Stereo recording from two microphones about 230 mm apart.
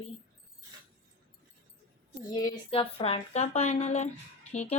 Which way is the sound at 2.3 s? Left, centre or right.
Centre.